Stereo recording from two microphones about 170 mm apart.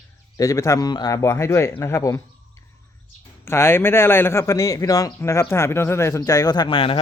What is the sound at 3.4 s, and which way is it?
A man's voice, 15° left (ahead or behind).